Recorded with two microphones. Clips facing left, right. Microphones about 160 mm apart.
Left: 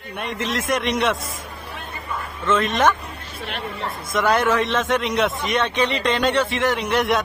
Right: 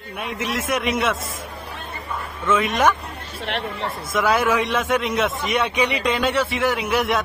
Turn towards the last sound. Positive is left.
turn(degrees=-5)  # may be behind; listen again after turning